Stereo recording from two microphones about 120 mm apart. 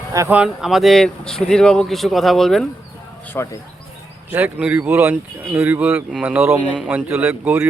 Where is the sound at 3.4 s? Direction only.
20° left (ahead or behind).